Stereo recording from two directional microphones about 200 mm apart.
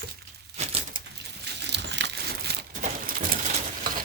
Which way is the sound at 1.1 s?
55° right (ahead or behind).